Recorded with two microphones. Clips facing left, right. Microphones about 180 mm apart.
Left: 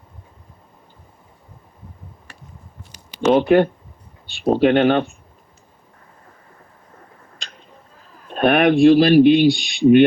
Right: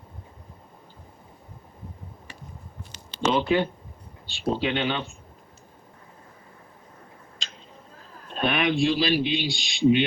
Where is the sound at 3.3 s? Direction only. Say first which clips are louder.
Left 10 dB; 55° left (ahead or behind).